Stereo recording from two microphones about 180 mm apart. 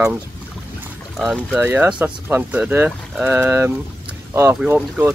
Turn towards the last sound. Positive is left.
turn(degrees=-10)  # may be behind; listen again after turning